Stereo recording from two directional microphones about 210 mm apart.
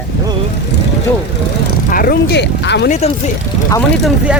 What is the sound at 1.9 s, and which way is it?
Speech, 45° left (ahead or behind).